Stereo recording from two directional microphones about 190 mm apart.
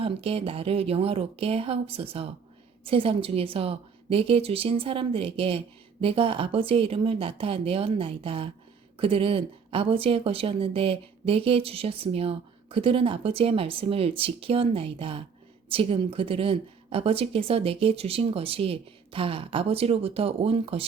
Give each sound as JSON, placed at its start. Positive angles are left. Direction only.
{"t": 0.0, "sound": "a woman's voice", "side_deg": -30}